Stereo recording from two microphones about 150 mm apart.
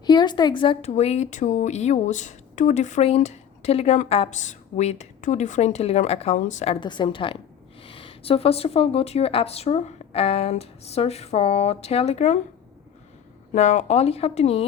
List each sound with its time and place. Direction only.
0.0 s a woman's voice: 30° left (ahead or behind)
0.9 s speech: 45° left (ahead or behind)
6.7 s a woman's voice: 30° left (ahead or behind); by 12.4 s 45° left (ahead or behind)
13.5 s speech: 50° left (ahead or behind)